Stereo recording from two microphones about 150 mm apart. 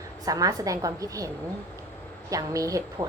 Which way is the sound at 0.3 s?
25° right (ahead or behind).